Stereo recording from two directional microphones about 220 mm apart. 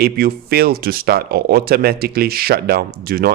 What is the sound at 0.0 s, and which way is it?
Speech, 45° right (ahead or behind).